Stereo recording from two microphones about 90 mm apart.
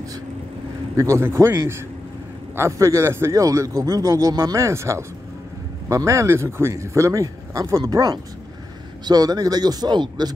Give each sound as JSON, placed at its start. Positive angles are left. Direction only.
{"t": 0.9, "sound": "a man's voice", "side_deg": -30}